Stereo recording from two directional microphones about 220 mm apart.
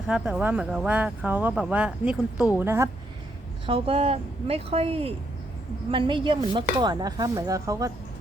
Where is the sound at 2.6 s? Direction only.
10° right (ahead or behind).